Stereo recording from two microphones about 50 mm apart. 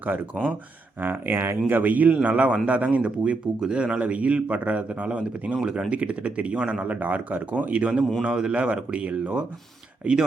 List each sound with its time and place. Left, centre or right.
1.0 s a man's voice: right; by 10.2 s centre